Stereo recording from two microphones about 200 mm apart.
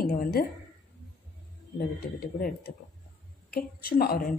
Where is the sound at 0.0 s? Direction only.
45° left (ahead or behind).